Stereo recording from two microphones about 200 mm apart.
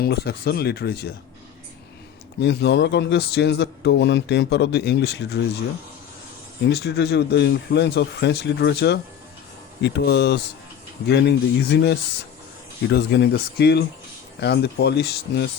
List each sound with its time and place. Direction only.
0.0 s speech: 55° left (ahead or behind)
2.4 s a man's voice: 60° left (ahead or behind)
6.7 s a man's voice: 55° left (ahead or behind)